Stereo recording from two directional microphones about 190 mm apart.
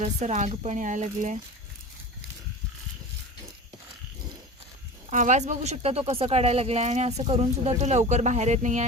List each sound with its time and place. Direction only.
0.0 s speech: 35° right (ahead or behind)
5.1 s speech: 40° right (ahead or behind)